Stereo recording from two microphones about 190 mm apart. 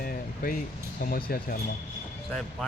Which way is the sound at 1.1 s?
50° left (ahead or behind).